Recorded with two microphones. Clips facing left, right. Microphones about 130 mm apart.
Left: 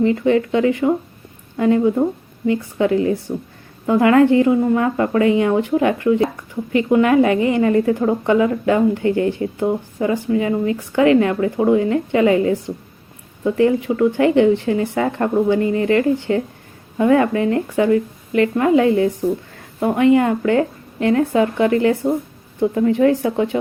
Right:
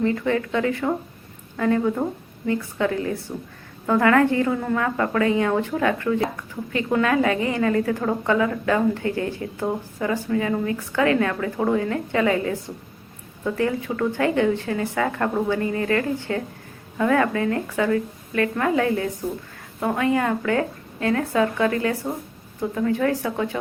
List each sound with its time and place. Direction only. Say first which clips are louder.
0.0 s speech: left 6 dB; 20° left (ahead or behind)
14.2 s speech: left 6 dB; 20° left (ahead or behind)